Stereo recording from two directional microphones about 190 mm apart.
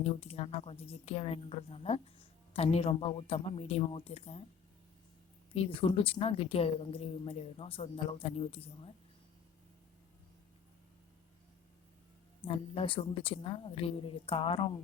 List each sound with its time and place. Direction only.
0.2 s a woman's voice: 30° left (ahead or behind)
5.5 s a woman's voice: 30° left (ahead or behind)
12.5 s a woman's voice: 30° left (ahead or behind)